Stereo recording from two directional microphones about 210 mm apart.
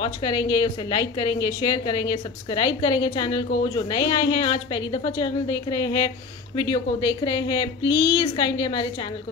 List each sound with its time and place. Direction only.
0.0 s speech: 20° left (ahead or behind)